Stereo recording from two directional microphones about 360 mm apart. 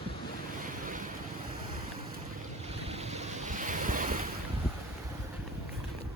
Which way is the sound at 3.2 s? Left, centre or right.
Centre.